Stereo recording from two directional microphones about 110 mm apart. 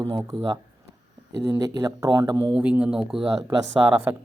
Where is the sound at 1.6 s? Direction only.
30° right (ahead or behind).